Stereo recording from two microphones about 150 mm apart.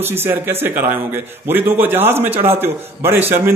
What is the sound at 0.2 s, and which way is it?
A man's voice, 15° right (ahead or behind).